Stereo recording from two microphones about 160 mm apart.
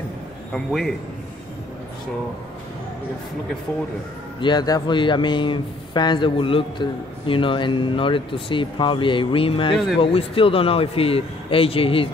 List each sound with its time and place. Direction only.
0.5 s a man's voice: centre (ahead or behind)
4.4 s speech: 25° left (ahead or behind)